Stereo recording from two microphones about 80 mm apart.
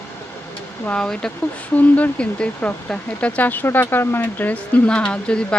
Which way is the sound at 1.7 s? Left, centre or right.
Centre.